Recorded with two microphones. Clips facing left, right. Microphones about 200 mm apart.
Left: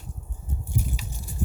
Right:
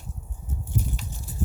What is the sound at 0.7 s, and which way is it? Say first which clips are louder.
Biting: right 1 dB; centre (ahead or behind).